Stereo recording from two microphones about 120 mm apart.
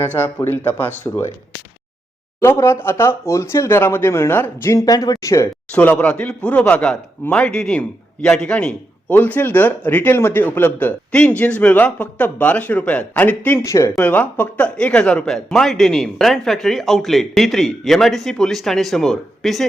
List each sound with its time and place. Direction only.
0.0 s speech: 15° left (ahead or behind)
2.4 s speech: 25° left (ahead or behind)
4.9 s speech: 30° left (ahead or behind)
5.7 s speech: 10° left (ahead or behind)
13.7 s speech: 25° left (ahead or behind)
14.0 s speech: 15° left (ahead or behind)